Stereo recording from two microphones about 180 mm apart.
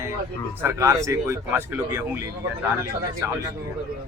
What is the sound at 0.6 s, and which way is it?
Speech, 15° right (ahead or behind).